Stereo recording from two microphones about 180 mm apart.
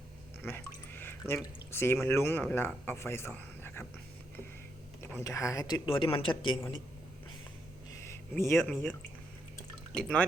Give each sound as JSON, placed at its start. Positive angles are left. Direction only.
{"t": 0.4, "sound": "drip", "side_deg": 10}
{"t": 1.7, "sound": "a man's voice", "side_deg": 15}
{"t": 5.0, "sound": "speech", "side_deg": 15}
{"t": 8.0, "sound": "speech", "side_deg": 15}